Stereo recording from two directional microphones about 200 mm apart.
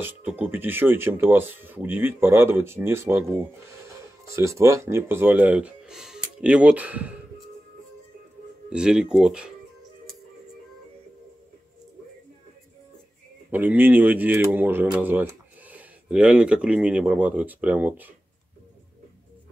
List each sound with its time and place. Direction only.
0.0 s speech: 10° right (ahead or behind)
4.4 s speech: 15° right (ahead or behind)
8.7 s speech: 5° right (ahead or behind)
13.5 s speech: 10° right (ahead or behind)